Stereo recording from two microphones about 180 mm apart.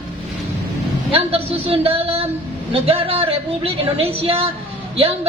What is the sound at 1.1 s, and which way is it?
Speech, 30° right (ahead or behind).